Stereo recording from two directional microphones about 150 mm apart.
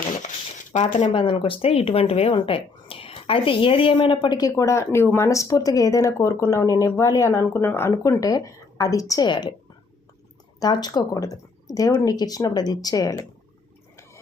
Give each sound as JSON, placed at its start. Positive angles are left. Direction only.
{"t": 0.7, "sound": "speech", "side_deg": 50}
{"t": 1.1, "sound": "speech", "side_deg": 35}
{"t": 10.6, "sound": "speech", "side_deg": 25}